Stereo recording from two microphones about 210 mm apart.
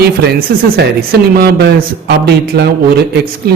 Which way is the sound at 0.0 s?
50° right (ahead or behind).